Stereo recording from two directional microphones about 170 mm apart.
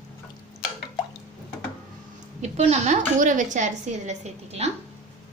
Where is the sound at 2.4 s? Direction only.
40° right (ahead or behind).